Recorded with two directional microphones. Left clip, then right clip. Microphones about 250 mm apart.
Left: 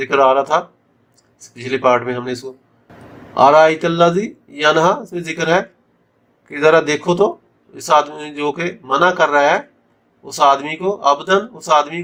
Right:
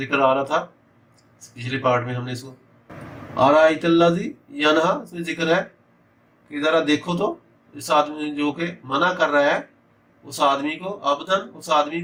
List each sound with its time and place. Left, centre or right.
0.1 s speech: left
1.6 s speech: left
3.4 s speech: left